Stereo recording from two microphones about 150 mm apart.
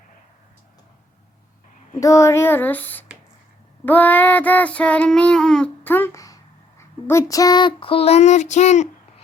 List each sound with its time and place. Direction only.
2.0 s child singing: 20° left (ahead or behind); by 8.9 s 50° left (ahead or behind)